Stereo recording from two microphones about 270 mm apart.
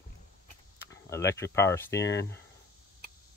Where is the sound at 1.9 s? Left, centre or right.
Left.